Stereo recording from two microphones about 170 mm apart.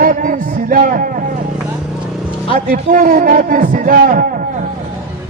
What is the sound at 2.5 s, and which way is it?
A man's voice, 50° right (ahead or behind).